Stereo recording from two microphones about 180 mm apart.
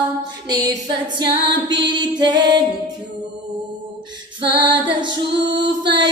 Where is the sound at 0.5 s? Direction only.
20° right (ahead or behind).